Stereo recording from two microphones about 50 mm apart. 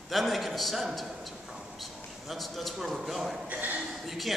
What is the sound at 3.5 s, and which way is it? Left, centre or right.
Speech, right.